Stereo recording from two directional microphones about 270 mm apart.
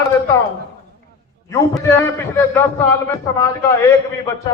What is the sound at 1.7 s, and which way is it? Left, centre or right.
Speech, centre.